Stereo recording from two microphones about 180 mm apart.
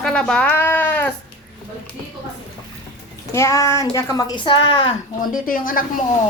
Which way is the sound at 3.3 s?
15° left (ahead or behind).